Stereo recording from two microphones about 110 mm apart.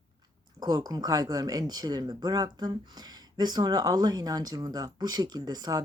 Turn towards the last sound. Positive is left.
turn(degrees=-35)  # may be behind; listen again after turning